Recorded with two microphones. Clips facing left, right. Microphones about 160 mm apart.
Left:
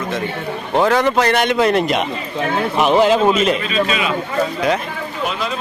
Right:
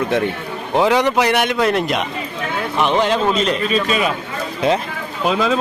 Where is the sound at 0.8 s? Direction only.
15° right (ahead or behind).